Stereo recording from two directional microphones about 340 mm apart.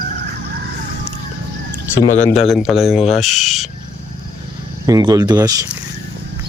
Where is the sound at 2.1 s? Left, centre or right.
Centre.